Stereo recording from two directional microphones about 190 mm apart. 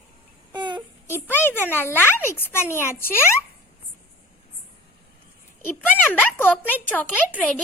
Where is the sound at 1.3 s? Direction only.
10° left (ahead or behind).